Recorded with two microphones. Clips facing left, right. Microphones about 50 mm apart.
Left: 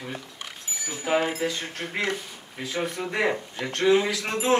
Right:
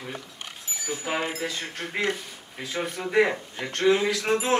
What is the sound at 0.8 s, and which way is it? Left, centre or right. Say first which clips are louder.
Speech: left 4 dB; centre.